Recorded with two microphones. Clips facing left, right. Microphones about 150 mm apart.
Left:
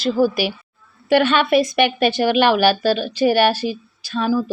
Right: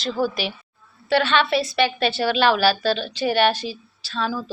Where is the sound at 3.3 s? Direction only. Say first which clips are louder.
Left 3 dB; 45° left (ahead or behind).